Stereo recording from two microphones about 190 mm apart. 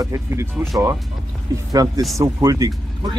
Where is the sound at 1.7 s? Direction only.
20° right (ahead or behind).